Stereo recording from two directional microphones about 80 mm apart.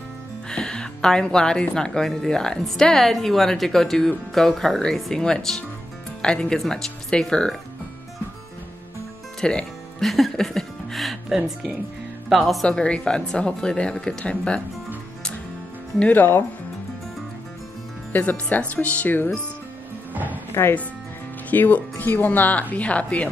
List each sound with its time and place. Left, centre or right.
0.5 s a woman's voice: centre
9.4 s speech: centre
12.6 s a woman's voice: centre
16.0 s speech: left
18.1 s speech: left
20.5 s speech: left